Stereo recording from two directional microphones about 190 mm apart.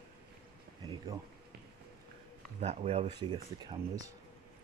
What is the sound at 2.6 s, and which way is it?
Speech, 35° right (ahead or behind).